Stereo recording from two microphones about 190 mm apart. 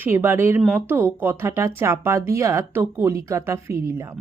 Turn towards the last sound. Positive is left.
turn(degrees=-15)  # may be behind; listen again after turning